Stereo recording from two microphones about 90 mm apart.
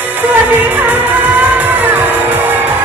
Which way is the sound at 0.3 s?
20° right (ahead or behind).